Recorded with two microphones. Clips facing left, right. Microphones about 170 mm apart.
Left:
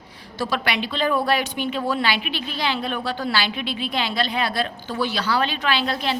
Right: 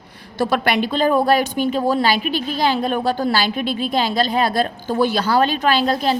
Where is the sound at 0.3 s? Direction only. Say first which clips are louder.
Right 6 dB; 55° right (ahead or behind).